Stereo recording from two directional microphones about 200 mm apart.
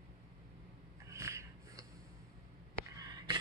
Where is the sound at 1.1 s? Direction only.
15° right (ahead or behind).